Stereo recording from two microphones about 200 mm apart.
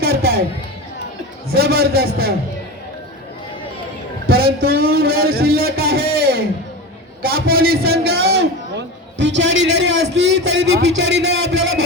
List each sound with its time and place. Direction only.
0.0 s a sound: 50° right (ahead or behind)
1.5 s speech: 50° right (ahead or behind)
4.3 s a man's voice: 50° right (ahead or behind)